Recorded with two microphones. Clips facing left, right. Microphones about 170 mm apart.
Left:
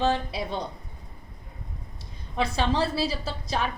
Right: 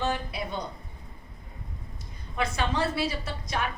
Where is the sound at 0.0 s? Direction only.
30° left (ahead or behind).